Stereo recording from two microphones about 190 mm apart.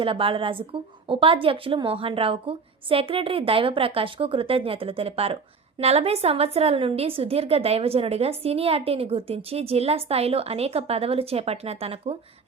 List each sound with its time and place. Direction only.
0.0 s a woman's voice: 25° right (ahead or behind)